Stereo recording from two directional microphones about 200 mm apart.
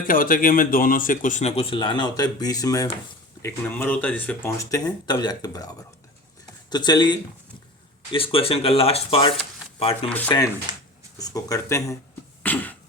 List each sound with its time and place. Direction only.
0.0 s speech: 45° left (ahead or behind); by 10.1 s 30° left (ahead or behind)
10.1 s speech: 10° left (ahead or behind)
12.4 s cough: 10° left (ahead or behind)